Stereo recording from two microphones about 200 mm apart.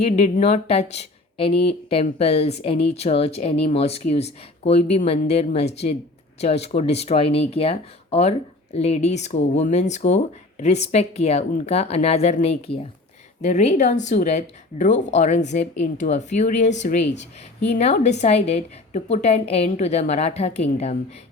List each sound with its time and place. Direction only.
0.0 s speech: 35° left (ahead or behind)